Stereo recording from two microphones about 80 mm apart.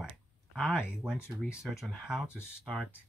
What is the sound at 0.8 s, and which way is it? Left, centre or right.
Speech, centre.